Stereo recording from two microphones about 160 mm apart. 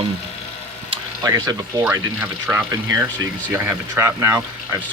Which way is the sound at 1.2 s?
20° right (ahead or behind).